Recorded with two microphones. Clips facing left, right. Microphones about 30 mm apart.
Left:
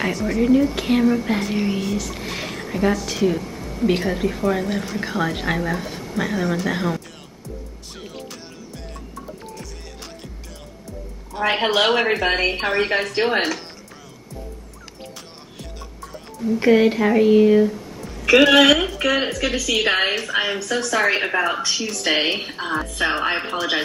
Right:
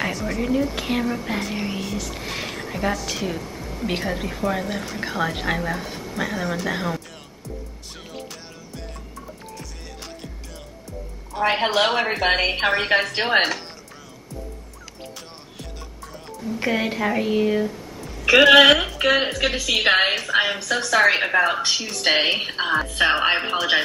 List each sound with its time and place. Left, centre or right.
0.0 s speech: centre
8.0 s music: centre
11.3 s speech: centre
12.4 s speech: centre
13.1 s a woman's voice: right
16.4 s speech: centre
18.5 s a woman's voice: right
19.9 s a woman's voice: centre
20.2 s a woman's voice: centre
21.5 s a woman's voice: centre
21.7 s speech: centre
22.7 s a woman's voice: right
23.3 s a woman's voice: centre